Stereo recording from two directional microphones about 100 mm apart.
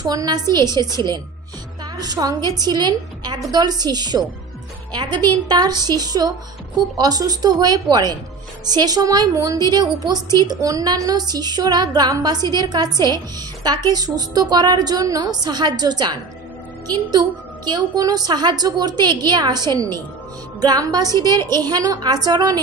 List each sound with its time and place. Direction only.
0.0 s a woman's voice: 40° right (ahead or behind)
17.6 s a woman's voice: 40° right (ahead or behind)